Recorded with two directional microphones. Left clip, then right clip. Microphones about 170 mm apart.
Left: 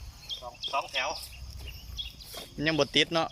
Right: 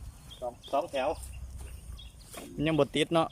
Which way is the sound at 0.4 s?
35° right (ahead or behind).